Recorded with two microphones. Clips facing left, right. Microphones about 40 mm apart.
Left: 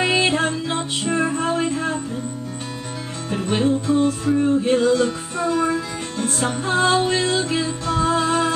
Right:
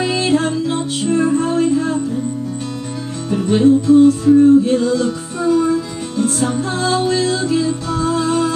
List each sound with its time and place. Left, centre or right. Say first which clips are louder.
0.3 s music: right 5 dB; centre
3.3 s music: right 7 dB; centre